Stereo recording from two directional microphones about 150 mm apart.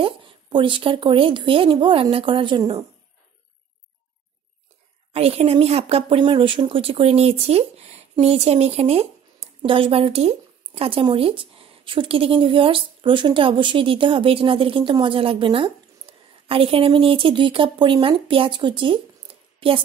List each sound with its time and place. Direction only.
0.0 s speech: 35° right (ahead or behind)
5.1 s a woman's voice: 40° right (ahead or behind)